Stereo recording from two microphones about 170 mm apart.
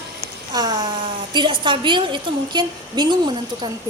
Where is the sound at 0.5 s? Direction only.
25° right (ahead or behind).